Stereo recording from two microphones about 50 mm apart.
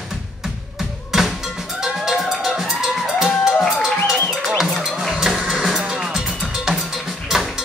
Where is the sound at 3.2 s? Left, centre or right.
Centre.